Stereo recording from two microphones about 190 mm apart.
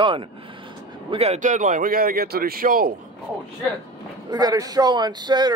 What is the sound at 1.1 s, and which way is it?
A man's voice, 35° right (ahead or behind).